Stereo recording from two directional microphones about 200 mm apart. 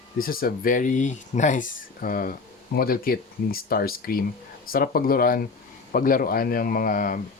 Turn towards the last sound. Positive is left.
turn(degrees=45)  # may be behind; listen again after turning